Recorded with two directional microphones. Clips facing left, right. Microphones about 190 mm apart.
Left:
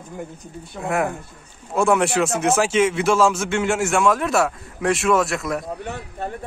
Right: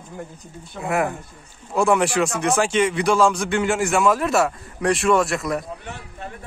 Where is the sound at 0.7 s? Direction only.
Centre (ahead or behind).